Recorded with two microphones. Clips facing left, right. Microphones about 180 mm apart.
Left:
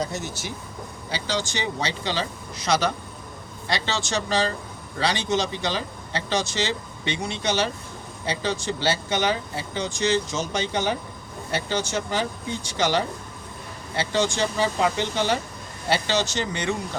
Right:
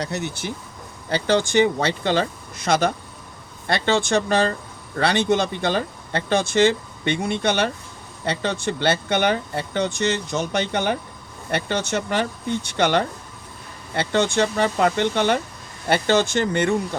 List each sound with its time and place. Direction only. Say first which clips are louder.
0.0 s speech: right 2 dB; 65° right (ahead or behind)